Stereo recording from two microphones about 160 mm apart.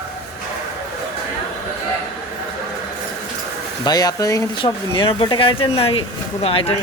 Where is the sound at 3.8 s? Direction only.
25° left (ahead or behind).